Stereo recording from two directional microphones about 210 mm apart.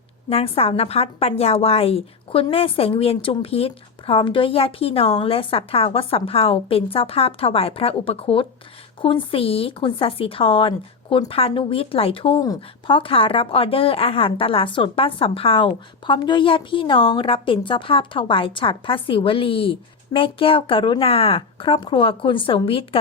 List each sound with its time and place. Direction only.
0.3 s speech: 25° left (ahead or behind)